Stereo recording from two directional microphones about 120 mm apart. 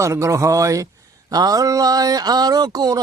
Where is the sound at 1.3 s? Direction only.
30° right (ahead or behind).